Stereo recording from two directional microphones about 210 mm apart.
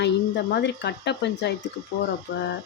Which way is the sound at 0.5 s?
55° left (ahead or behind).